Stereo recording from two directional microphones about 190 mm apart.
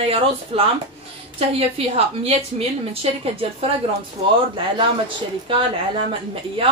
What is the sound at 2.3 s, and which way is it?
A woman's voice, 30° right (ahead or behind).